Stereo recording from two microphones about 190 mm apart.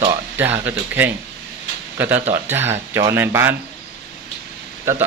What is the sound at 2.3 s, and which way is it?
Speech, 10° right (ahead or behind).